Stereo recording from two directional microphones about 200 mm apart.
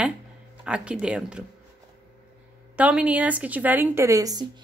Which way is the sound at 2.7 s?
5° right (ahead or behind).